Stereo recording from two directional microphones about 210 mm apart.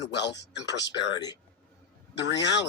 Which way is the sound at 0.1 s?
55° left (ahead or behind).